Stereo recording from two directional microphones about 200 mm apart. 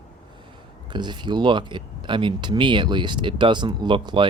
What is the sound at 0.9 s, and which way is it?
Speech, 20° right (ahead or behind).